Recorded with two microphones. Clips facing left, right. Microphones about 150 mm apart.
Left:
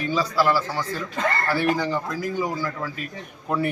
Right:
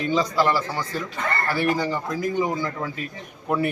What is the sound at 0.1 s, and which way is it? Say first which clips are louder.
A man's voice: even; 20° right (ahead or behind).